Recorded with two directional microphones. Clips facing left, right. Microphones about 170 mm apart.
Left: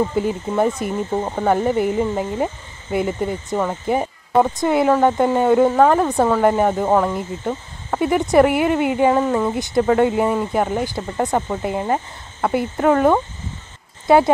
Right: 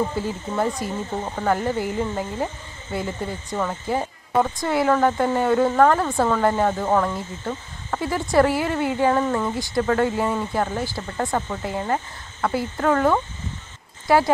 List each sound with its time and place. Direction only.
0.1 s speech: 20° left (ahead or behind)